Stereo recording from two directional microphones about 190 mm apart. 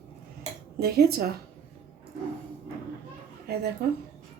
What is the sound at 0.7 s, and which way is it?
Speech, 55° right (ahead or behind).